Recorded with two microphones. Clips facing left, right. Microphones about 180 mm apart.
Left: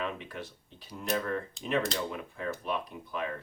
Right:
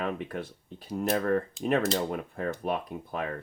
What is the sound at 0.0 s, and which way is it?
Speech, 55° right (ahead or behind).